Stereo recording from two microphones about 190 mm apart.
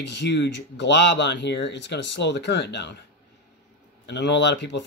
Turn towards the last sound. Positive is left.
turn(degrees=65)  # may be behind; listen again after turning